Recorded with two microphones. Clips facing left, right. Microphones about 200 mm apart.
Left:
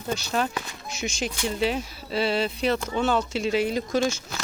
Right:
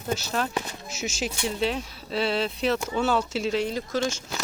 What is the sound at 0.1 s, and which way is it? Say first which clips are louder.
Speech: left 1 dB; centre (ahead or behind).